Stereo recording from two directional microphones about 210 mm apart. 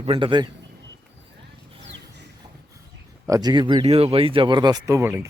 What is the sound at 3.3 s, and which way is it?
Speech, 20° right (ahead or behind).